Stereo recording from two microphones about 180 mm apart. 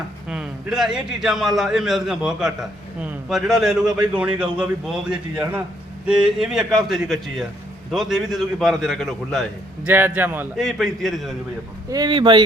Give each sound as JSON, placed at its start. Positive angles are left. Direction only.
{"t": 0.3, "sound": "a man's voice", "side_deg": -5}
{"t": 9.8, "sound": "speech", "side_deg": -10}
{"t": 10.6, "sound": "a man's voice", "side_deg": 0}
{"t": 11.9, "sound": "speech", "side_deg": -25}